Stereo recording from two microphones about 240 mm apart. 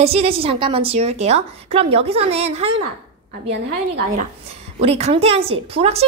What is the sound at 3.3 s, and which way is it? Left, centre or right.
Speech, right.